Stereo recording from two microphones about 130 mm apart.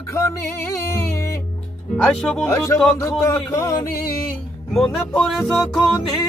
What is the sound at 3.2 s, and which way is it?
Music, 20° left (ahead or behind).